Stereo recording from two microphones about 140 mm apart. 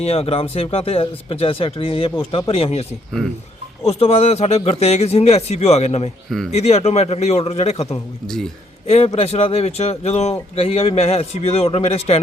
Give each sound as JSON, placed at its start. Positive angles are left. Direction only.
{"t": 0.0, "sound": "speech", "side_deg": 45}
{"t": 3.8, "sound": "speech", "side_deg": 45}
{"t": 9.1, "sound": "speech", "side_deg": 50}